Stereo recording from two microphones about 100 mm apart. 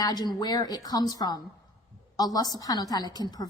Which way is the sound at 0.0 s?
40° left (ahead or behind).